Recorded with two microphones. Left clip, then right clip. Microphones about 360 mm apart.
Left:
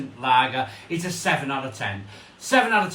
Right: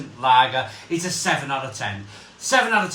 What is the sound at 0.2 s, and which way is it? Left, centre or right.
A man's voice, centre.